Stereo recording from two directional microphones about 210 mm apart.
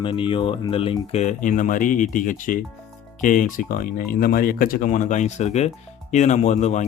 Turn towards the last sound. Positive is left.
turn(degrees=35)  # may be behind; listen again after turning